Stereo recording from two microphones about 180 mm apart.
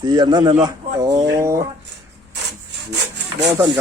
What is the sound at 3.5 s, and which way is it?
Speech, 15° right (ahead or behind).